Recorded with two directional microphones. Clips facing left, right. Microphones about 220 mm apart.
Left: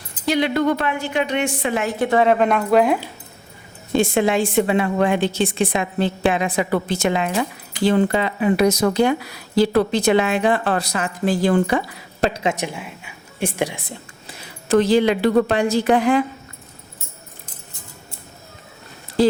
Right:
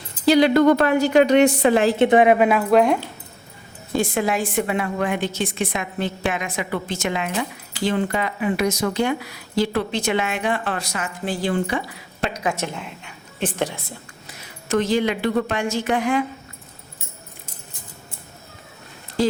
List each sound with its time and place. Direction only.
0.3 s a woman's voice: 35° right (ahead or behind); by 3.0 s centre (ahead or behind)
3.9 s a woman's voice: 25° left (ahead or behind); by 11.8 s 45° left (ahead or behind)
12.2 s a woman's voice: 30° left (ahead or behind)
12.6 s a woman's voice: 10° left (ahead or behind)
14.3 s speech: 30° left (ahead or behind)